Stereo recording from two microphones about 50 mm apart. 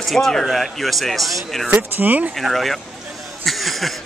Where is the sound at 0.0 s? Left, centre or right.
Centre.